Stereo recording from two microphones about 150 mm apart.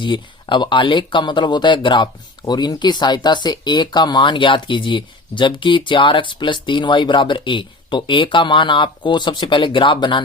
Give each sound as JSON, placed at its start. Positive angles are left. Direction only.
{"t": 0.0, "sound": "speech", "side_deg": 30}